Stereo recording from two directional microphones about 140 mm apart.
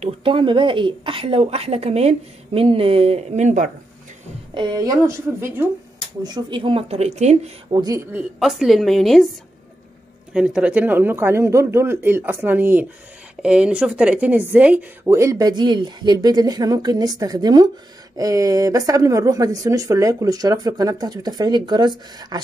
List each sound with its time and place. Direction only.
0.0 s a woman's voice: 40° right (ahead or behind); by 3.7 s 60° right (ahead or behind)
4.6 s a woman's voice: 30° right (ahead or behind)
6.2 s a woman's voice: 30° right (ahead or behind); by 7.5 s 55° right (ahead or behind)
7.7 s a woman's voice: 25° right (ahead or behind)
8.1 s a woman's voice: 5° right (ahead or behind)
10.3 s a woman's voice: 5° right (ahead or behind); by 22.4 s 30° right (ahead or behind)